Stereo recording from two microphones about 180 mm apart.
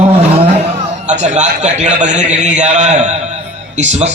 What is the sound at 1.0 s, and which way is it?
A man's voice, 40° right (ahead or behind).